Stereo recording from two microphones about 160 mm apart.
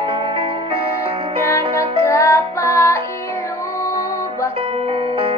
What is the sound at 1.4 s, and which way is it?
Music, 20° left (ahead or behind).